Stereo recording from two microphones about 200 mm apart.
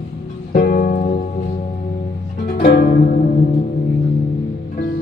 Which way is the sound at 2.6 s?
45° left (ahead or behind).